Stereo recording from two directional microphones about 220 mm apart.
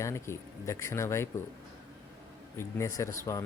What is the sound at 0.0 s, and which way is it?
Speech, 15° left (ahead or behind).